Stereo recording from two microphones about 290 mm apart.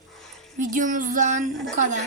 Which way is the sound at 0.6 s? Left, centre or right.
Right.